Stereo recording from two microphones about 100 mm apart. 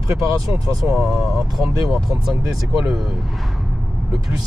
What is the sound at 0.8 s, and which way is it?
Speech, 5° right (ahead or behind).